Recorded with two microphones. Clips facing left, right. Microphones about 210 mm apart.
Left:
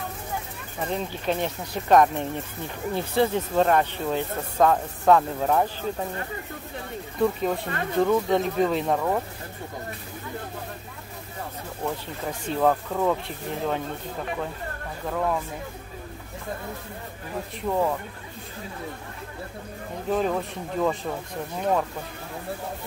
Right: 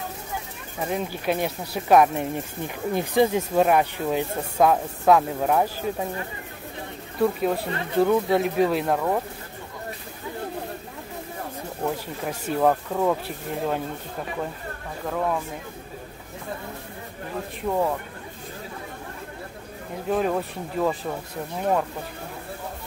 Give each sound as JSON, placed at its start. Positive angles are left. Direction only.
{"t": 0.7, "sound": "speech", "side_deg": -10}
{"t": 7.2, "sound": "speech", "side_deg": -5}
{"t": 12.3, "sound": "speech", "side_deg": -10}
{"t": 15.0, "sound": "speech", "side_deg": 0}
{"t": 17.6, "sound": "speech", "side_deg": -5}
{"t": 20.1, "sound": "speech", "side_deg": -5}